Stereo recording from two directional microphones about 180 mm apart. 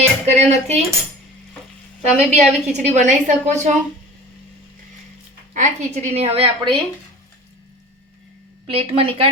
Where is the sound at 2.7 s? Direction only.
40° right (ahead or behind).